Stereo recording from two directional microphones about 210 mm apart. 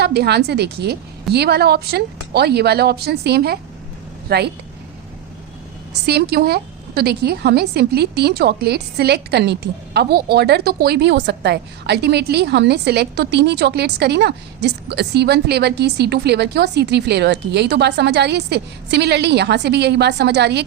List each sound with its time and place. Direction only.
0.0 s a woman's voice: 50° right (ahead or behind)
6.1 s a woman's voice: 50° right (ahead or behind)